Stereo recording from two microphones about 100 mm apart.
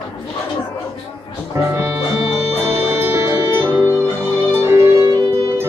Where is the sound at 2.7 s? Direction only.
25° right (ahead or behind).